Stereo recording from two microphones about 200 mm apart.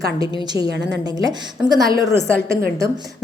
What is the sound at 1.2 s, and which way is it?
A woman's voice, 20° right (ahead or behind).